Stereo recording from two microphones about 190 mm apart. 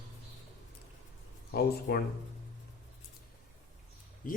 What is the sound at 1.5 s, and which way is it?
Speech, 55° left (ahead or behind).